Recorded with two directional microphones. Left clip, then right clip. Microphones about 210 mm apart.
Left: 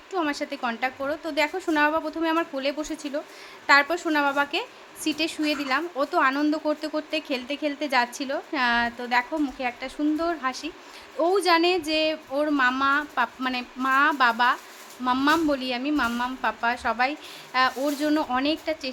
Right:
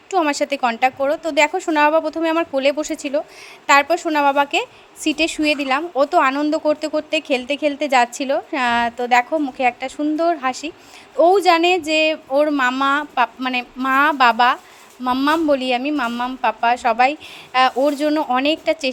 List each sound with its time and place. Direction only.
0.1 s speech: 30° right (ahead or behind)